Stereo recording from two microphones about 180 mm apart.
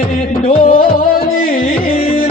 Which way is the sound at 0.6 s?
55° left (ahead or behind).